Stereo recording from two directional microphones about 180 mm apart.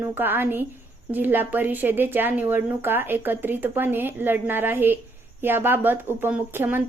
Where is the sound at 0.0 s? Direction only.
10° right (ahead or behind).